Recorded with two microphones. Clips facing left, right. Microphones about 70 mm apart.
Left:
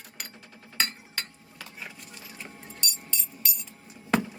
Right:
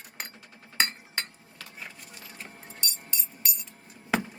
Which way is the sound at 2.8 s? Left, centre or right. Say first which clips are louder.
Left 1 dB; right.